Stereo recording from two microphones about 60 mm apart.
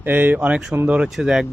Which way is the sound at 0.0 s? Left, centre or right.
Right.